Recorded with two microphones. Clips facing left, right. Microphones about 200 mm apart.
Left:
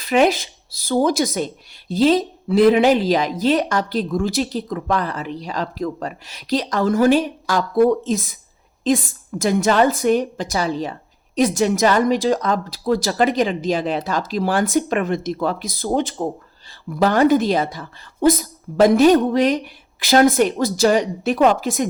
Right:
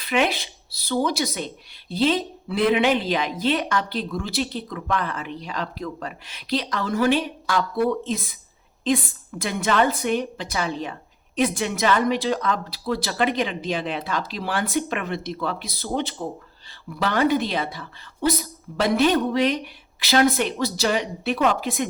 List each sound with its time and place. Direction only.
0.0 s a woman's voice: 40° left (ahead or behind)
9.4 s a woman's voice: 40° left (ahead or behind)